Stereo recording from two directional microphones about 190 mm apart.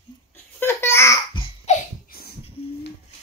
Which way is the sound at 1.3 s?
30° left (ahead or behind).